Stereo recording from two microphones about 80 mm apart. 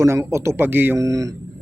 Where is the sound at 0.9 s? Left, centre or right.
Right.